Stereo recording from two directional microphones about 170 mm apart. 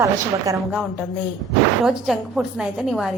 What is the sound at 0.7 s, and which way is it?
A woman's voice, 5° right (ahead or behind).